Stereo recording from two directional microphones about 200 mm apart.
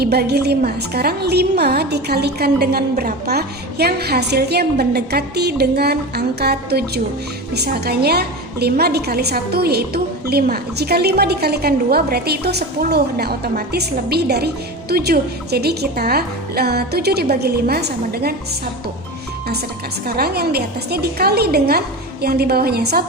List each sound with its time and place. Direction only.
0.0 s a woman's voice: 55° right (ahead or behind)
20.1 s a woman's voice: 50° right (ahead or behind)